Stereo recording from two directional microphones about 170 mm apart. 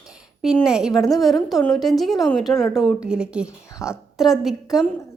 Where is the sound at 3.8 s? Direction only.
15° left (ahead or behind).